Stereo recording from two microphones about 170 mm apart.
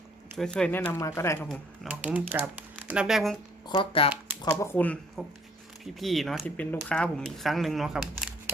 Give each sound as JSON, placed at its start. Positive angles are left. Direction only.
{"t": 0.3, "sound": "speech", "side_deg": 5}
{"t": 1.5, "sound": "speech", "side_deg": -5}
{"t": 3.7, "sound": "speech", "side_deg": 30}
{"t": 4.4, "sound": "speech", "side_deg": 10}